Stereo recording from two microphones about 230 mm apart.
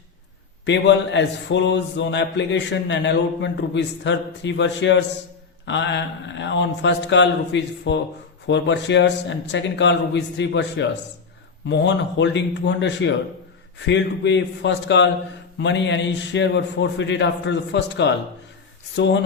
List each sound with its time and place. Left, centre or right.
0.6 s a man's voice: left